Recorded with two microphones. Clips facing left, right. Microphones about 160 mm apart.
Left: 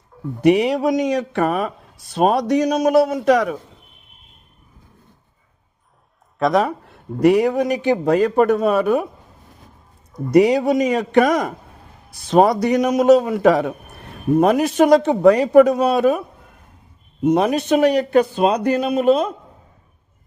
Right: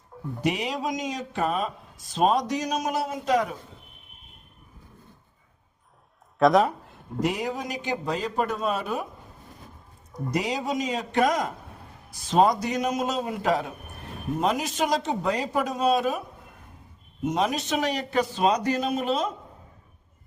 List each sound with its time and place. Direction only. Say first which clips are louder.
0.4 s speech: left 12 dB; 65° left (ahead or behind)
6.4 s speech: left 2 dB; centre (ahead or behind)
6.7 s speech: left 7 dB; 65° left (ahead or behind)
10.3 s speech: left 14 dB; 65° left (ahead or behind)
14.3 s speech: left 11 dB; 60° left (ahead or behind)
17.2 s speech: left 9 dB; 60° left (ahead or behind)